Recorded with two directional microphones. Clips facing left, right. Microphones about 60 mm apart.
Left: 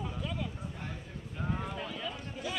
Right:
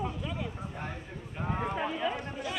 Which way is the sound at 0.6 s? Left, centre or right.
Right.